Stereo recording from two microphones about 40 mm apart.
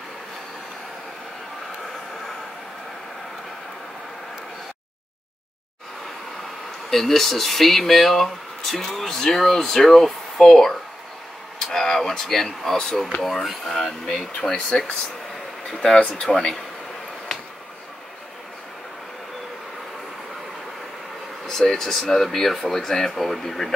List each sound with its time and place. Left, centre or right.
6.9 s speech: centre
14.3 s speech: left
21.5 s speech: centre